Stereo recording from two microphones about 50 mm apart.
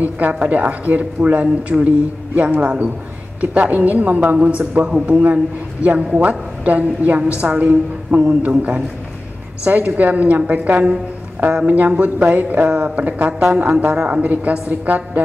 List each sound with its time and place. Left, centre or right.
0.0 s a woman's voice: right